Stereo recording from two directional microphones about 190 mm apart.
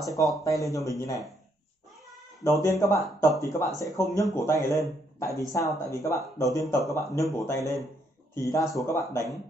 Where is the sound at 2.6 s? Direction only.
15° left (ahead or behind).